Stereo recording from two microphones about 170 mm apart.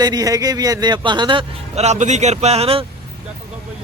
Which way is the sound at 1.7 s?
40° right (ahead or behind).